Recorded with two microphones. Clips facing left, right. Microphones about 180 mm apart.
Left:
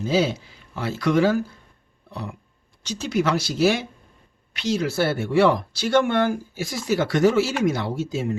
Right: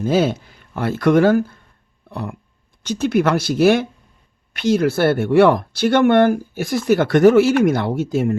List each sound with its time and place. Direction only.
0.0 s speech: 55° right (ahead or behind)
2.0 s a sound: 55° right (ahead or behind)
2.8 s speech: 55° right (ahead or behind)